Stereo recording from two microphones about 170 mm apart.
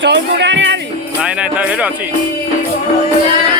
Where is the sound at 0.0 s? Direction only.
90° right.